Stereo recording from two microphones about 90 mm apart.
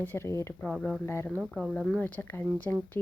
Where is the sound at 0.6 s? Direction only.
5° left (ahead or behind).